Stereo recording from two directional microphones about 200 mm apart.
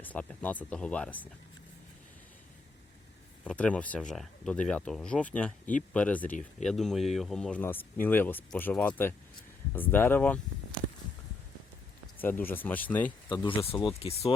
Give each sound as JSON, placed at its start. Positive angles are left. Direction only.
{"t": 0.0, "sound": "speech", "side_deg": 5}
{"t": 3.4, "sound": "speech", "side_deg": 5}
{"t": 12.2, "sound": "speech", "side_deg": 10}
{"t": 13.3, "sound": "speech", "side_deg": 25}